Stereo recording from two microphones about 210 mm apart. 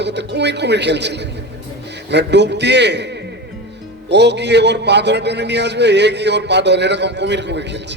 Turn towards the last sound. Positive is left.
turn(degrees=-55)  # may be behind; listen again after turning